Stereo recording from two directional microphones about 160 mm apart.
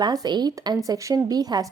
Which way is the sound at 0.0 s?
25° right (ahead or behind).